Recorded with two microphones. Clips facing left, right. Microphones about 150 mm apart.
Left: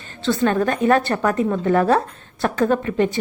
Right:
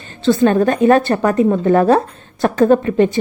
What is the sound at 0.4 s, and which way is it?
A woman's voice, 30° right (ahead or behind).